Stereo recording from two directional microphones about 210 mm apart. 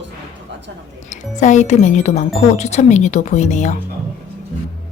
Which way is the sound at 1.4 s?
35° left (ahead or behind).